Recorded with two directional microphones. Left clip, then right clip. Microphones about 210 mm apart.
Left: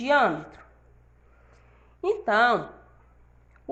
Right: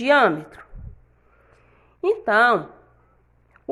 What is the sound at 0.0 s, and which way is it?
Speech, 50° right (ahead or behind).